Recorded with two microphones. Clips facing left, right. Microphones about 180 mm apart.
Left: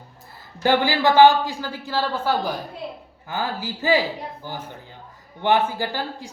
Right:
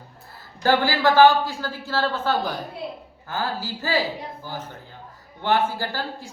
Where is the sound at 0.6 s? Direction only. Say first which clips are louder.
Left 1 dB; 15° left (ahead or behind).